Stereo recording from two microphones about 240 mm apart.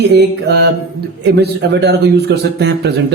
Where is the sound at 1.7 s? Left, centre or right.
Right.